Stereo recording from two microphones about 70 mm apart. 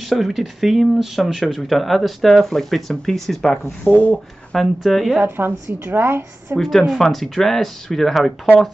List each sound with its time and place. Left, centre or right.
0.0 s speech: centre
3.8 s speech: left
4.5 s speech: centre
5.2 s a woman's voice: right
7.0 s speech: centre